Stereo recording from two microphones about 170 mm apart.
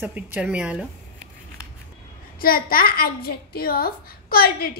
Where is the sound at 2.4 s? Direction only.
60° left (ahead or behind).